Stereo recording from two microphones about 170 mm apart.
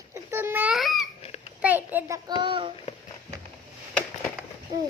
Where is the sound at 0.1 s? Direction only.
15° right (ahead or behind).